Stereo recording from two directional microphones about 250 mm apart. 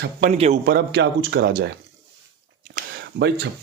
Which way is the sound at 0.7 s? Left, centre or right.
Right.